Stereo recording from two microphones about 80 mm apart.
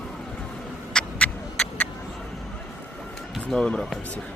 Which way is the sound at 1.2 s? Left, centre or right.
Centre.